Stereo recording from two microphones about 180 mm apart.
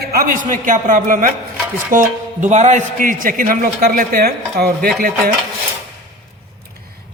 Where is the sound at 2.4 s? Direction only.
40° right (ahead or behind); by 4.9 s 60° right (ahead or behind).